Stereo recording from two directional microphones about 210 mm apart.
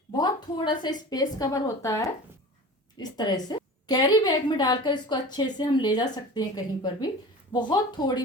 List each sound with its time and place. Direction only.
0.2 s a woman's voice: 20° left (ahead or behind)